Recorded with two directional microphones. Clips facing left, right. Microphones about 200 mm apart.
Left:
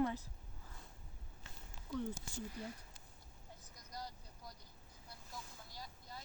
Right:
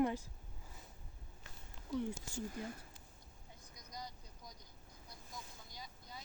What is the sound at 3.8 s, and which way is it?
Vehicle, 5° left (ahead or behind).